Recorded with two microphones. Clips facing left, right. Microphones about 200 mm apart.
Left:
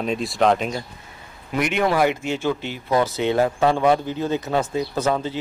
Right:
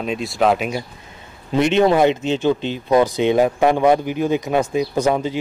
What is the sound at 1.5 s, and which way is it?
A man's voice, 25° right (ahead or behind).